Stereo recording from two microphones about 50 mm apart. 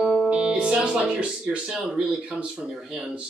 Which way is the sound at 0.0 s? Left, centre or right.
Centre.